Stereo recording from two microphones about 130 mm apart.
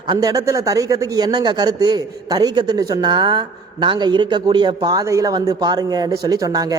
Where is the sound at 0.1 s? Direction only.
30° right (ahead or behind).